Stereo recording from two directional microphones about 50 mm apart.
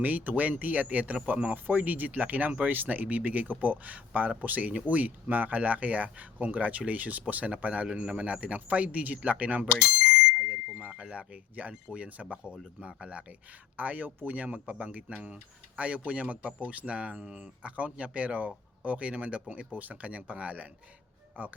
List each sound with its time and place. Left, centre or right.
0.0 s speech: right
13.7 s speech: right